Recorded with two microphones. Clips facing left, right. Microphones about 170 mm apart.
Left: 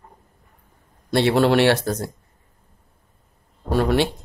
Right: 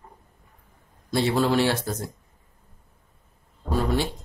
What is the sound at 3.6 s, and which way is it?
Speech, 70° left (ahead or behind).